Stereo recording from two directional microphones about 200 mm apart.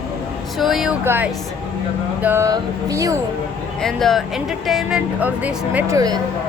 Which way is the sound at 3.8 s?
Centre (ahead or behind).